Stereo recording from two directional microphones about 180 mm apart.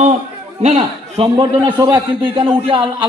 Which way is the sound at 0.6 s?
35° right (ahead or behind).